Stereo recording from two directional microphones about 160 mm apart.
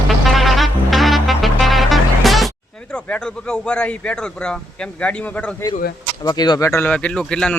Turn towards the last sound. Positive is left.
turn(degrees=5)  # may be behind; listen again after turning